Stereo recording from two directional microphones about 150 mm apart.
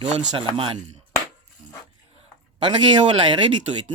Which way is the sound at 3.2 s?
30° right (ahead or behind).